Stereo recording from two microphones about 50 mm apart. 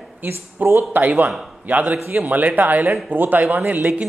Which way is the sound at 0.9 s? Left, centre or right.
Right.